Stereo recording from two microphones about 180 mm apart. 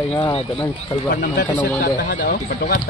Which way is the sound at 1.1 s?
55° left (ahead or behind).